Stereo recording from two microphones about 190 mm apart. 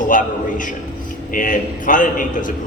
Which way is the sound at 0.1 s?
45° left (ahead or behind).